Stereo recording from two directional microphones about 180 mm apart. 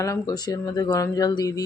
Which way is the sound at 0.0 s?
20° left (ahead or behind).